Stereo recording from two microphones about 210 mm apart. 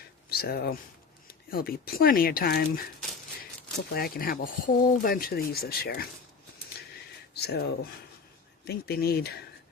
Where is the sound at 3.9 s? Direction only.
45° left (ahead or behind).